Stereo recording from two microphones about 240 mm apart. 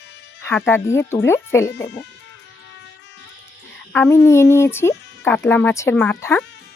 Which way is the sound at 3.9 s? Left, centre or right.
Centre.